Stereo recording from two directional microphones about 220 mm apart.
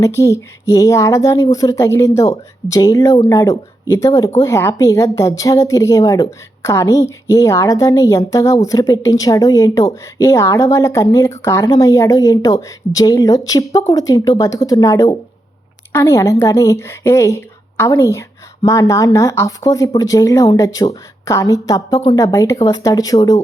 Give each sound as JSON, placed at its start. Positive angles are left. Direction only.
{"t": 0.0, "sound": "speech", "side_deg": 15}